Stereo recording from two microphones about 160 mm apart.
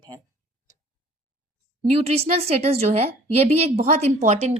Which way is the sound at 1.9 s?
40° right (ahead or behind).